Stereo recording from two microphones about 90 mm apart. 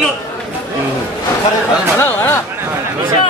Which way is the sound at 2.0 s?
30° left (ahead or behind).